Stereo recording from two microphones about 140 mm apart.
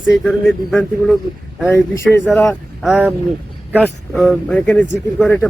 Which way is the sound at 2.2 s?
Centre (ahead or behind).